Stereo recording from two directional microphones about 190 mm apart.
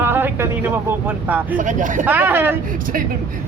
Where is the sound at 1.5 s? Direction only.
45° right (ahead or behind).